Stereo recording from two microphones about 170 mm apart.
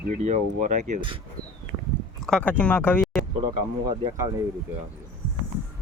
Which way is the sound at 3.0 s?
Centre (ahead or behind).